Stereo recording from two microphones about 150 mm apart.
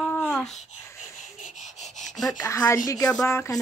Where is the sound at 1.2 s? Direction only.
55° left (ahead or behind).